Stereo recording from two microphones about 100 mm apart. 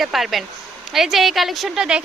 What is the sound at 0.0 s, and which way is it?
A woman's voice, centre (ahead or behind).